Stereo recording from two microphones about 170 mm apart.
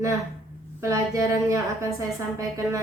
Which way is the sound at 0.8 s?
15° right (ahead or behind).